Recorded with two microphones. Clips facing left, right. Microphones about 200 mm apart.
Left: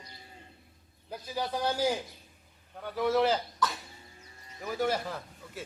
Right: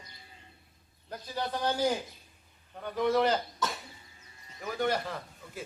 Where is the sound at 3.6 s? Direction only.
25° right (ahead or behind).